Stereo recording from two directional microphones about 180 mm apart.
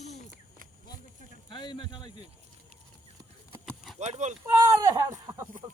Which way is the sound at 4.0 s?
40° right (ahead or behind).